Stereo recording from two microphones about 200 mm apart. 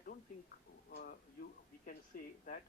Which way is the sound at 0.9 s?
50° left (ahead or behind).